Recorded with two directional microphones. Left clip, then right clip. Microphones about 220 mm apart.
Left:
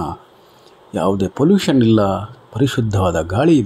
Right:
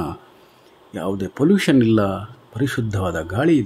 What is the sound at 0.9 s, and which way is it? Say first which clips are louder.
Speech: left 7 dB; 5° left (ahead or behind).